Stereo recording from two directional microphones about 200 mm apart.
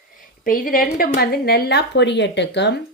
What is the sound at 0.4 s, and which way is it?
Speech, 45° left (ahead or behind).